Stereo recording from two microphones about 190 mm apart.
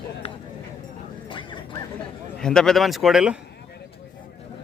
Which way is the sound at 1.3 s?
25° left (ahead or behind).